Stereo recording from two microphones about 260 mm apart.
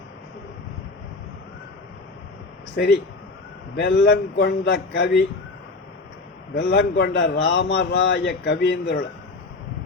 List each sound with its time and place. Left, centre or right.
3.8 s a man's voice: left
6.5 s a man's voice: left